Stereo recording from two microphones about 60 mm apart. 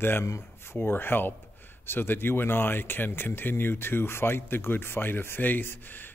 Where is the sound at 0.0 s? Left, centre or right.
Left.